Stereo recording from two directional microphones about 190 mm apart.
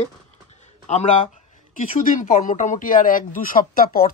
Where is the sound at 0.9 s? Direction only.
35° left (ahead or behind).